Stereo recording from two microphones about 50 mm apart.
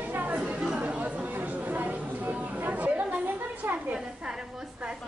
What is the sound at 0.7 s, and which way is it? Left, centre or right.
Chatter, right.